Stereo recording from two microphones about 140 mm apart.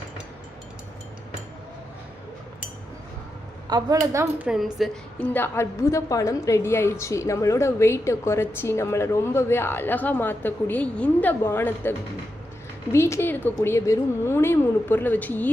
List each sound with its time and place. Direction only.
3.7 s speech: 30° right (ahead or behind)
4.4 s a woman's voice: centre (ahead or behind)
5.2 s a woman's voice: 15° left (ahead or behind)